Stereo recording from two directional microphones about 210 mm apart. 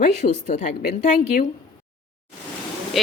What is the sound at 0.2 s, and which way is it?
A woman's voice, 35° left (ahead or behind).